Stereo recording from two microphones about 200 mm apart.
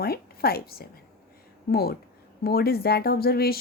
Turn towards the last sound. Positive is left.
turn(degrees=50)  # may be behind; listen again after turning